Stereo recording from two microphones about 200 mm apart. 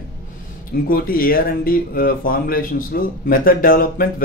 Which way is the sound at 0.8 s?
45° left (ahead or behind).